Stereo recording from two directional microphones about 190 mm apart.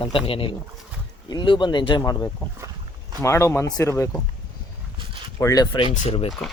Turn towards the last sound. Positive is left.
turn(degrees=35)  # may be behind; listen again after turning